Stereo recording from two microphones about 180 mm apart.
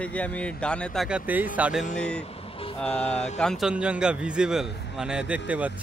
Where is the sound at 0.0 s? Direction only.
5° left (ahead or behind).